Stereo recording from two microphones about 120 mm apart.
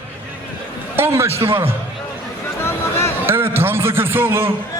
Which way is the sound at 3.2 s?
20° right (ahead or behind).